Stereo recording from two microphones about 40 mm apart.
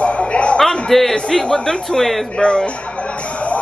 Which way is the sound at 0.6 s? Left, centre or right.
Centre.